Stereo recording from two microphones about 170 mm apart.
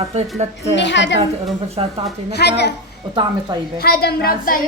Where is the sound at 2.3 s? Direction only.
75° left (ahead or behind).